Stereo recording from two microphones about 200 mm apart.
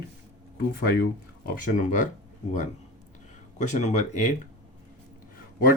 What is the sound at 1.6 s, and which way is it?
Speech, 40° left (ahead or behind).